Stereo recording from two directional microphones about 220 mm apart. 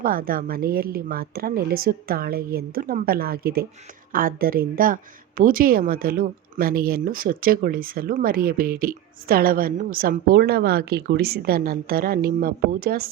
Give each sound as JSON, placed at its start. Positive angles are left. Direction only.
{"t": 0.0, "sound": "a woman's voice", "side_deg": -40}